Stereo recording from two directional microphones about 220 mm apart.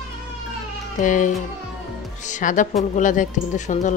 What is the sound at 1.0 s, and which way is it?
Speech, 35° left (ahead or behind).